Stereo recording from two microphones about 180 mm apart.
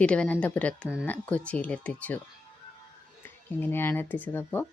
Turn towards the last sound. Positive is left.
turn(degrees=10)  # may be behind; listen again after turning